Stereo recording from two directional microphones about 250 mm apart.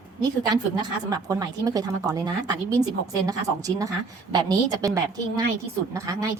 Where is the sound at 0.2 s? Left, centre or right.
Centre.